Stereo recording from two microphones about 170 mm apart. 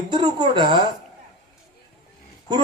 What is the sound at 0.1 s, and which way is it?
Speech, 25° right (ahead or behind).